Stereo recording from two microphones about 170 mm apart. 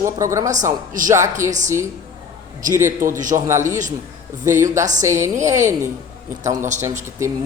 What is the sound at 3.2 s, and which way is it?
Speech, 50° right (ahead or behind).